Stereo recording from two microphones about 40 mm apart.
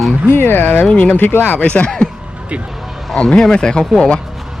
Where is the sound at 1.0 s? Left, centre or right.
Left.